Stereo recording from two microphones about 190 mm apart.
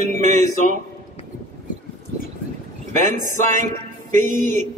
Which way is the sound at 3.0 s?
40° right (ahead or behind).